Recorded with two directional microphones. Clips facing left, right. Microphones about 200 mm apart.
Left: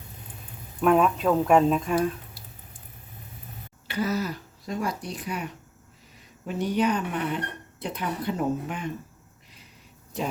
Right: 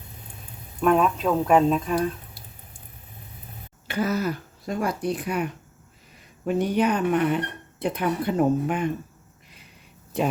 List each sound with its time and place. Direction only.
0.8 s speech: centre (ahead or behind)
3.8 s speech: 50° right (ahead or behind)